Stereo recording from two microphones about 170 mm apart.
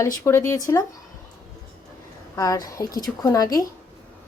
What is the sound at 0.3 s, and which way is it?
Speech, 15° left (ahead or behind).